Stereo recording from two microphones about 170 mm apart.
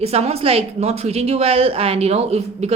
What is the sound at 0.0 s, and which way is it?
Speech, 35° right (ahead or behind).